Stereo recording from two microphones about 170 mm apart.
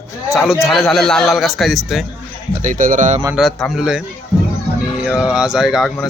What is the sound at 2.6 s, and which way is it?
Speech, 50° right (ahead or behind).